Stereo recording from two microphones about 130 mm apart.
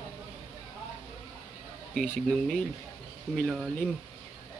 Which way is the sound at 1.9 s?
10° left (ahead or behind).